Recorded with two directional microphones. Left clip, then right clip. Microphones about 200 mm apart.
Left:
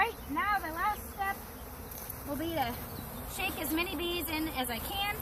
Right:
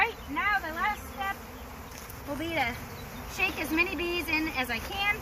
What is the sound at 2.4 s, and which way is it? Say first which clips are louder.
Speech: right 4 dB; centre (ahead or behind).